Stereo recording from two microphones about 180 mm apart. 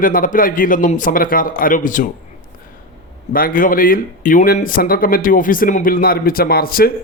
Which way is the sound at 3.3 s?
50° left (ahead or behind).